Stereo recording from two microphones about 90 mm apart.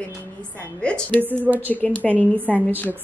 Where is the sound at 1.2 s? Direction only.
20° right (ahead or behind).